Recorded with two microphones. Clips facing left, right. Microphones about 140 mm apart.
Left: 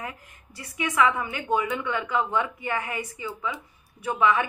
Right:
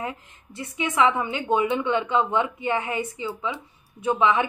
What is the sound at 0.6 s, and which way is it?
A woman's voice, 25° right (ahead or behind).